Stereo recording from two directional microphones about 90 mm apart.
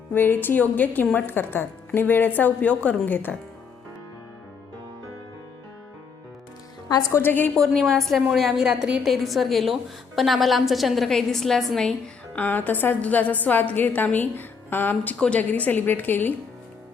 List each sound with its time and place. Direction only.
0.1 s a woman's voice: 20° left (ahead or behind)
7.1 s a woman's voice: 25° left (ahead or behind)
7.5 s a woman's voice: 5° left (ahead or behind)
12.4 s a woman's voice: 20° left (ahead or behind)